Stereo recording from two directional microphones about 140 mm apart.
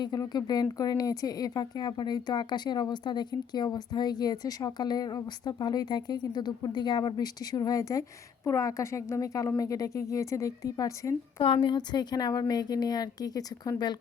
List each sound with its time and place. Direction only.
0.0 s speech: 30° left (ahead or behind)
11.3 s speech: 35° left (ahead or behind)